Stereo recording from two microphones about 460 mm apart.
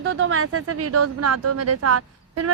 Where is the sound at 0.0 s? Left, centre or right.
Right.